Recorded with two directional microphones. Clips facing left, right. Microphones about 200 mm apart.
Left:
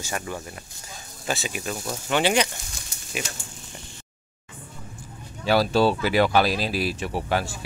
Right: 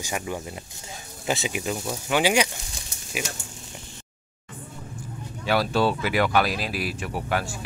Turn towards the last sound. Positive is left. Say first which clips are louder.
# left 2 dB
turn(degrees=30)  # may be behind; listen again after turning